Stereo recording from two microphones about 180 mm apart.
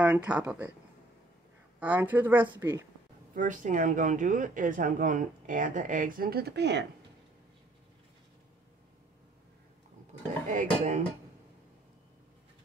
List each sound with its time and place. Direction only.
0.0 s speech: 5° right (ahead or behind)
1.8 s speech: 10° right (ahead or behind)
3.3 s speech: 45° right (ahead or behind); by 6.9 s 70° right (ahead or behind)
10.5 s speech: 45° right (ahead or behind)